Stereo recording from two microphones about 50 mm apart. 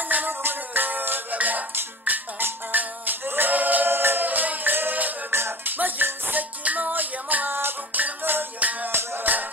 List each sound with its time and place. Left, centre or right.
0.0 s music: right
5.3 s music: right
5.7 s music: right
6.6 s music: right
8.5 s music: right
8.9 s music: right